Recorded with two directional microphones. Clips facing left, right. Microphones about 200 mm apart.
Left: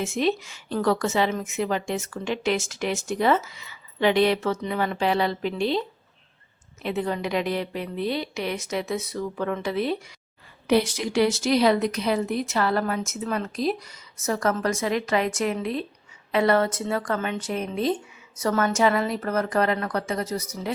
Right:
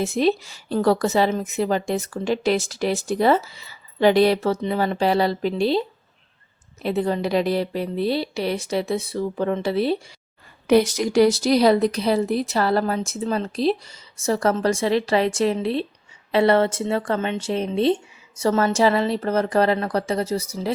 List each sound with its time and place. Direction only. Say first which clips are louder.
0.0 s a woman's voice: right 4 dB; 35° right (ahead or behind)
6.8 s a woman's voice: right 4 dB; 35° right (ahead or behind)
10.7 s a woman's voice: right 5 dB; 45° right (ahead or behind)